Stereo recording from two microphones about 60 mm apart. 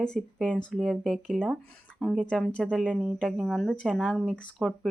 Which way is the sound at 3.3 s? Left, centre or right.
Centre.